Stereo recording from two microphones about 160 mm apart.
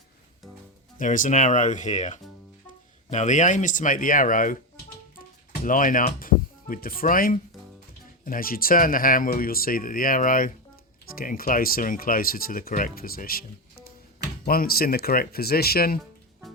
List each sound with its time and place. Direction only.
0.9 s speech: 55° left (ahead or behind)
14.4 s speech: 65° left (ahead or behind)